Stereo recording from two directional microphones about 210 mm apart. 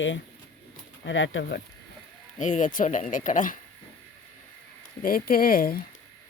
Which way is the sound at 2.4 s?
35° left (ahead or behind).